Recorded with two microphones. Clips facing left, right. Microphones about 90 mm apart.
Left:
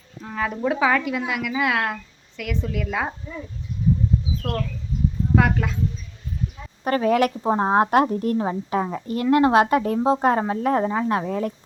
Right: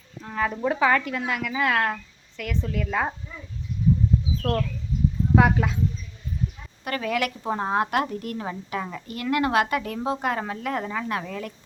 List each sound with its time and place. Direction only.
0.2 s speech: centre (ahead or behind)
5.3 s speech: 5° right (ahead or behind)
6.8 s speech: 35° left (ahead or behind)